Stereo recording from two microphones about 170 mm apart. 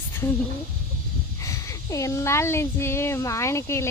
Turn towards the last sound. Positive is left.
turn(degrees=15)  # may be behind; listen again after turning